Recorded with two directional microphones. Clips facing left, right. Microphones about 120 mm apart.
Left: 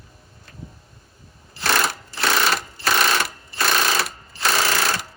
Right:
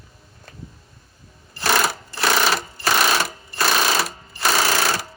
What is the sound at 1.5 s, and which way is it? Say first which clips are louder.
Sewing machine: right 2 dB; centre (ahead or behind).